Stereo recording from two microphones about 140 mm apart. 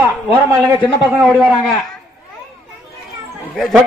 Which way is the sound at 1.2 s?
5° left (ahead or behind).